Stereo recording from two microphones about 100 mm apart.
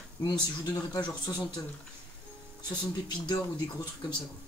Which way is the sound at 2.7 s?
45° left (ahead or behind).